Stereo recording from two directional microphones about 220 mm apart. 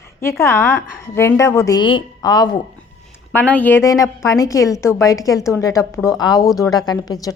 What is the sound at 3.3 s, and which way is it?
A woman's voice, 5° left (ahead or behind).